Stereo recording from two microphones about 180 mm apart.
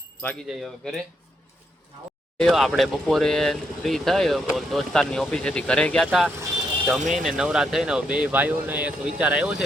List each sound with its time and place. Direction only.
0.4 s speech: centre (ahead or behind)
2.4 s speech: centre (ahead or behind)
7.0 s speech: 45° right (ahead or behind)
7.3 s speech: 5° right (ahead or behind)